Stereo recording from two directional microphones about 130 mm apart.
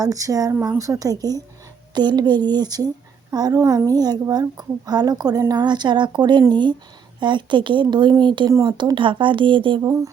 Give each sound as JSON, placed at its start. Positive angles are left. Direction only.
{"t": 0.0, "sound": "a woman's voice", "side_deg": -25}
{"t": 9.8, "sound": "speech", "side_deg": -25}